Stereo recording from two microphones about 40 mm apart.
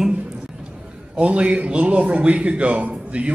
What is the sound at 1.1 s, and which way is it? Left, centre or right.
A man's voice, right.